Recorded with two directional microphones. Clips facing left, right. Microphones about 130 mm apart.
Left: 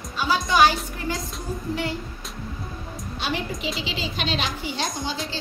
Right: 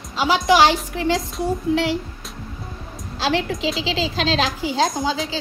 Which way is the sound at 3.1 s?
90° right.